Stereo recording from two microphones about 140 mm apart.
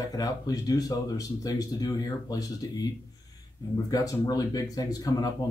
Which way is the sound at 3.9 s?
25° left (ahead or behind).